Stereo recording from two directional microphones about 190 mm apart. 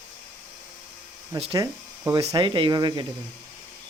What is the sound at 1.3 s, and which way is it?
Speech, 25° right (ahead or behind).